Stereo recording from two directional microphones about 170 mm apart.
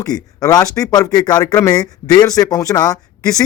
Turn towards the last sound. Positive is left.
turn(degrees=20)  # may be behind; listen again after turning